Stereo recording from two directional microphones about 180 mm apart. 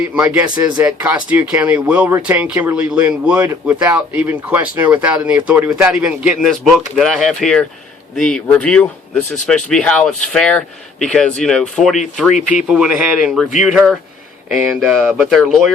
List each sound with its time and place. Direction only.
0.0 s speech: 10° right (ahead or behind)
12.3 s speech: 45° left (ahead or behind)
12.5 s speech: 5° right (ahead or behind)